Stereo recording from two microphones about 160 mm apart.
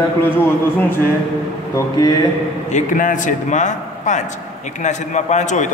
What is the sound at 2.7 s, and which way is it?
Speech, 55° left (ahead or behind).